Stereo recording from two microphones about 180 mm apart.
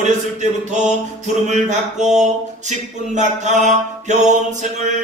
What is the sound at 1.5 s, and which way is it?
Mantra, 40° right (ahead or behind).